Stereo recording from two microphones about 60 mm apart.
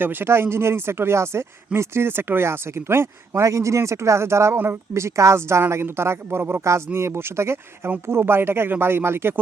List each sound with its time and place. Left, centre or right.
0.0 s speech: right
4.5 s speech: right
4.9 s speech: right